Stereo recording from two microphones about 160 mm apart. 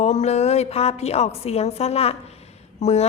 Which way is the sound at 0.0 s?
45° left (ahead or behind).